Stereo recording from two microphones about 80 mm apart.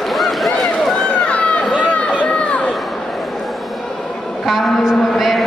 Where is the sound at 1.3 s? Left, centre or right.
Centre.